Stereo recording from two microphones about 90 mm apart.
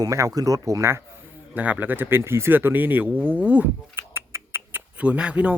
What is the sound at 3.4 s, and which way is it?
Rodents, 15° right (ahead or behind).